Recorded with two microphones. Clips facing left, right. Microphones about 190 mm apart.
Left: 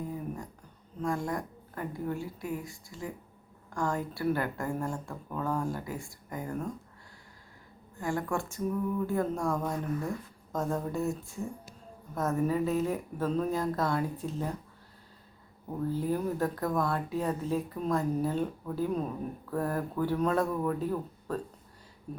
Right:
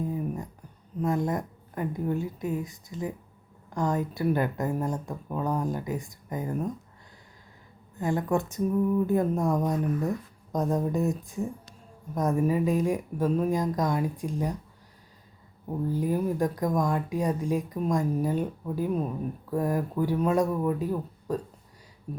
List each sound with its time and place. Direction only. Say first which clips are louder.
0.0 s a sound: right 5 dB; 20° right (ahead or behind)
1.0 s a woman's voice: right 4 dB; 20° right (ahead or behind)
7.9 s a woman's voice: right 5 dB; 20° right (ahead or behind)
15.9 s speech: right 3 dB; 15° right (ahead or behind)